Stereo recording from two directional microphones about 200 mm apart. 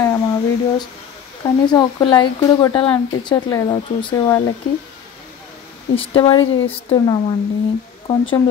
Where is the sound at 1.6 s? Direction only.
20° left (ahead or behind).